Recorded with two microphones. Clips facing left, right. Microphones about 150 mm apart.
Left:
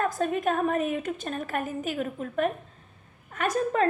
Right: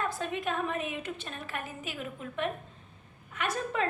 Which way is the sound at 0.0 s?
45° left (ahead or behind).